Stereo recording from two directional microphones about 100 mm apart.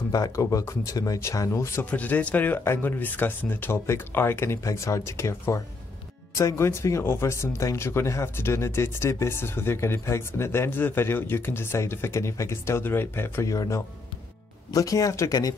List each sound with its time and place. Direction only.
0.1 s speech: 35° left (ahead or behind)
1.9 s speech: 15° left (ahead or behind); by 15.5 s 35° left (ahead or behind)